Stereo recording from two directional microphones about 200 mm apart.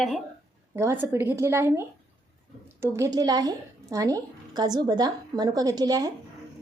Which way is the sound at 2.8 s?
15° right (ahead or behind).